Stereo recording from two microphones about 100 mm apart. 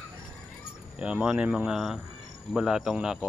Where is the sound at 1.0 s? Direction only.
10° right (ahead or behind).